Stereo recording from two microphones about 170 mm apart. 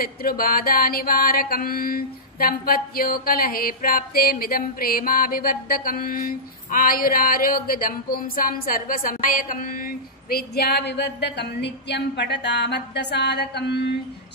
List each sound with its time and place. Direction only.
0.0 s a woman's voice: 60° left (ahead or behind)